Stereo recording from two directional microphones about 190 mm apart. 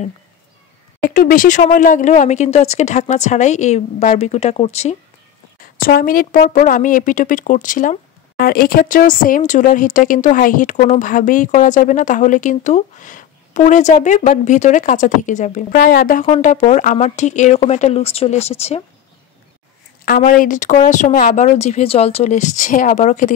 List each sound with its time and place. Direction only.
1.0 s a woman's voice: 45° left (ahead or behind)
5.6 s a woman's voice: 50° left (ahead or behind); by 18.8 s 35° left (ahead or behind)
20.1 s a woman's voice: 45° left (ahead or behind)